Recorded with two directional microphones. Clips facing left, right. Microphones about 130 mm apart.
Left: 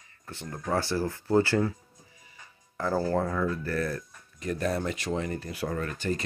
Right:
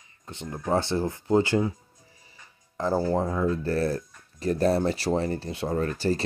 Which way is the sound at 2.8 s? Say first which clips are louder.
Right 2 dB; 20° right (ahead or behind).